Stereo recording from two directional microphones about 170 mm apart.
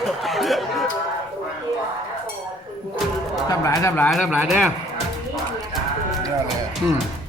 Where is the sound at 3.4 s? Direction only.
20° left (ahead or behind).